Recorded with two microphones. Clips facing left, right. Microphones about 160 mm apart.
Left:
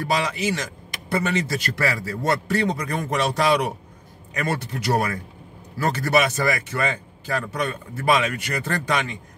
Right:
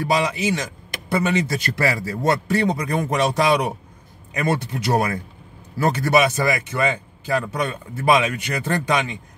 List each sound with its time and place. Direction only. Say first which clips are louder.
0.0 s speech: right 3 dB; 15° right (ahead or behind)